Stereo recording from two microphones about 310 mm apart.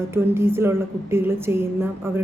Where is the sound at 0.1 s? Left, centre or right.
Centre.